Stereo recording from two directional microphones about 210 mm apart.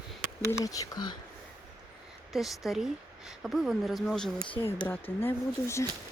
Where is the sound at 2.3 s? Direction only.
Centre (ahead or behind).